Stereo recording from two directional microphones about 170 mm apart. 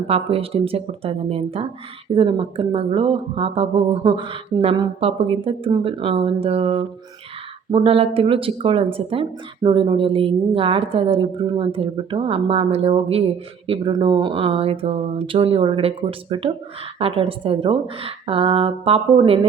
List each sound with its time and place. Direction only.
0.1 s speech: 35° right (ahead or behind)